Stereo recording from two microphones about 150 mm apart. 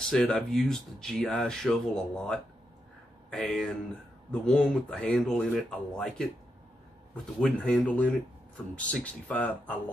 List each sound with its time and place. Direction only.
0.1 s speech: 5° left (ahead or behind)
7.3 s speech: 5° left (ahead or behind)